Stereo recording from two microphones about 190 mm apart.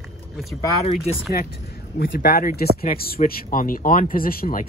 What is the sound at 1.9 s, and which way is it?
Speech, 55° left (ahead or behind).